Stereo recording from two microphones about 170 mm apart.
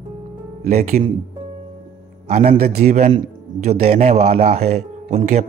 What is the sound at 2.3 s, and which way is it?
Speech, 45° right (ahead or behind).